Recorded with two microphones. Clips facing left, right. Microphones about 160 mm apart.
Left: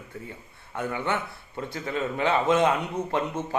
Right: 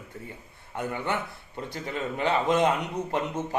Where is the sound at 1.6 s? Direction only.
15° right (ahead or behind).